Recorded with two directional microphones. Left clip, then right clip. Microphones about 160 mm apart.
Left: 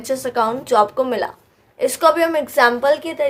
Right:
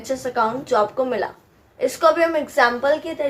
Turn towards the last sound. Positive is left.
turn(degrees=55)  # may be behind; listen again after turning